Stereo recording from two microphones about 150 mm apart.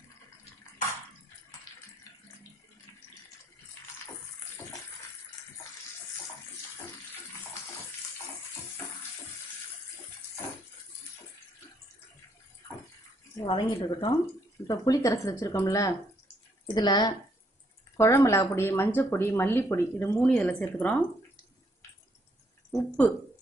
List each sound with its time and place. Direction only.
1.7 s water: 25° left (ahead or behind)
13.5 s a woman's voice: 35° left (ahead or behind)
14.7 s speech: 25° left (ahead or behind)
22.7 s a sound: centre (ahead or behind)